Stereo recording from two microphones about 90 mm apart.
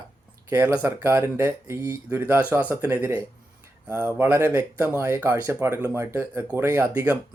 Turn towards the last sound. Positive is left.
turn(degrees=-25)  # may be behind; listen again after turning